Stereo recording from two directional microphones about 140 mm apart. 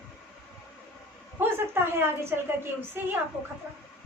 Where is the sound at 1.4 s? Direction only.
15° right (ahead or behind).